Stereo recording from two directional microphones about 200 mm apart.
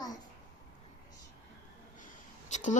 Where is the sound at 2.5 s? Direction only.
40° left (ahead or behind).